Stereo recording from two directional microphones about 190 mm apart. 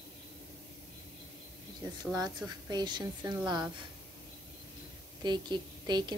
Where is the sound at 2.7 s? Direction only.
25° right (ahead or behind).